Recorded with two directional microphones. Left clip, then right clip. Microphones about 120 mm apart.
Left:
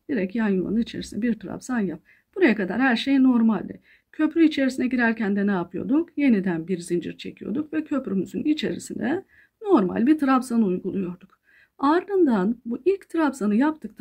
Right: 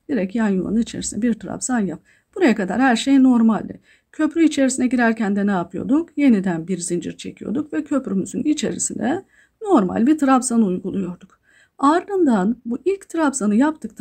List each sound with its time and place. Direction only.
0.1 s speech: 40° right (ahead or behind)